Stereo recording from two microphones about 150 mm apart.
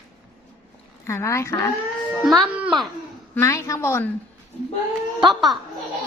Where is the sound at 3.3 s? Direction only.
20° left (ahead or behind).